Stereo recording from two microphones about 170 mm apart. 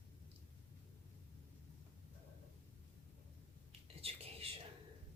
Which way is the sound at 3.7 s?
35° right (ahead or behind).